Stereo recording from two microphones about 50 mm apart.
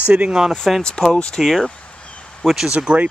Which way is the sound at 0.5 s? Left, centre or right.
Centre.